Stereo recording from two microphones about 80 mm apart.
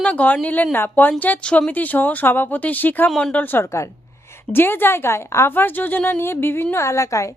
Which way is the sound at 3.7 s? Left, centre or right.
Left.